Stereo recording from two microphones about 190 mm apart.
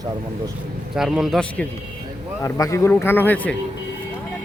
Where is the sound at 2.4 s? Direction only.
15° left (ahead or behind).